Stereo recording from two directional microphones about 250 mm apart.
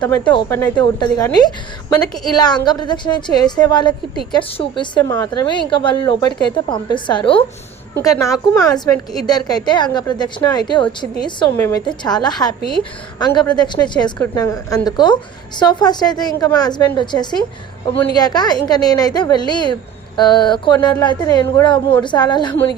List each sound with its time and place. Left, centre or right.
0.0 s a woman's voice: centre